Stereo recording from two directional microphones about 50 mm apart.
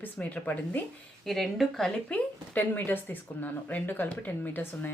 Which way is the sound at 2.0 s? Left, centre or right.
Left.